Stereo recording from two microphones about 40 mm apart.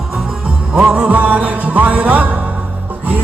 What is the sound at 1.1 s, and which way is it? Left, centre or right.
Music, right.